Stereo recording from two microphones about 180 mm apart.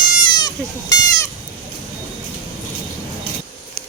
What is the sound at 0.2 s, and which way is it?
Goat, 25° left (ahead or behind).